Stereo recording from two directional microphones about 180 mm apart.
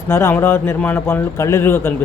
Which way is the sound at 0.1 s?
15° left (ahead or behind).